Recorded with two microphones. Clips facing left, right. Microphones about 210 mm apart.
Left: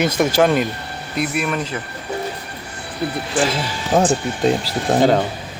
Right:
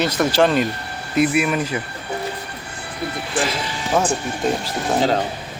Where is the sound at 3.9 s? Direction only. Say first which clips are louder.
Left 4 dB; 35° left (ahead or behind).